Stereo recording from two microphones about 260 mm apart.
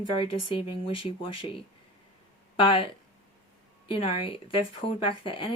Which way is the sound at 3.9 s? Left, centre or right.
Left.